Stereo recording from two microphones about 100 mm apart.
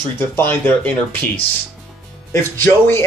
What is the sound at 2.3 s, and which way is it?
Speech, 25° left (ahead or behind).